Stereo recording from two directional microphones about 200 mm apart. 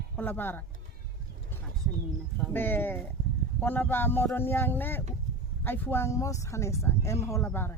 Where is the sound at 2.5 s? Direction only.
10° left (ahead or behind).